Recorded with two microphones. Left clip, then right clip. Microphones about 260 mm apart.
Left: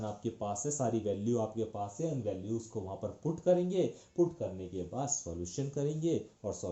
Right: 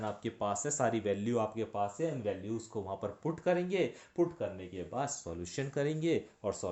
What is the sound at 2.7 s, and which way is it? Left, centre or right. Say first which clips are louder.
Speech: right 1 dB; right.